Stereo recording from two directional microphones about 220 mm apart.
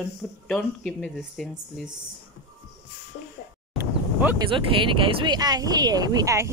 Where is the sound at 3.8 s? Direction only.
10° right (ahead or behind).